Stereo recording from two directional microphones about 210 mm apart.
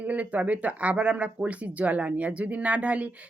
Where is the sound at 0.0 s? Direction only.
5° right (ahead or behind).